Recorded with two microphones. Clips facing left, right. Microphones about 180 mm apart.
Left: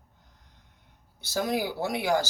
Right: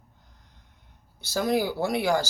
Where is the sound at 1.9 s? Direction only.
20° left (ahead or behind).